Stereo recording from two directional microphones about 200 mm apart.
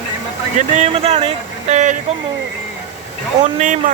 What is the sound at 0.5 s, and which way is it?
Speech, 30° right (ahead or behind).